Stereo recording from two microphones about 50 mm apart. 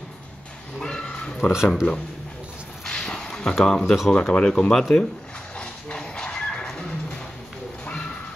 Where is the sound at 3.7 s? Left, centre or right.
Centre.